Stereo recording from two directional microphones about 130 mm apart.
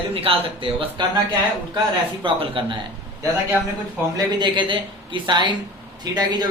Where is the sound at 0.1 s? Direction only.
45° right (ahead or behind).